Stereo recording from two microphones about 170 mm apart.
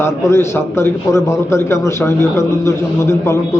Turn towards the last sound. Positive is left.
turn(degrees=15)  # may be behind; listen again after turning